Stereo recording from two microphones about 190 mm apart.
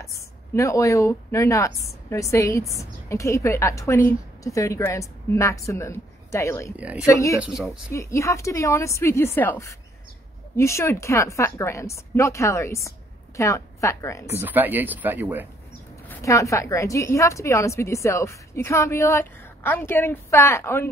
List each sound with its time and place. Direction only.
0.6 s a woman's voice: 15° left (ahead or behind)
6.8 s speech: 5° right (ahead or behind)
7.1 s a woman's voice: 15° left (ahead or behind)
7.3 s speech: 5° right (ahead or behind)
7.9 s a woman's voice: 15° left (ahead or behind)
14.3 s speech: 10° right (ahead or behind)
16.1 s a woman's voice: 15° left (ahead or behind)